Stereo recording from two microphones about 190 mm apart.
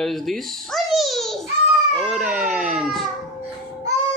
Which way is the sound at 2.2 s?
5° right (ahead or behind).